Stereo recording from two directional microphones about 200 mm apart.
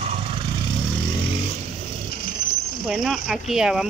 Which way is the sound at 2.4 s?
55° left (ahead or behind).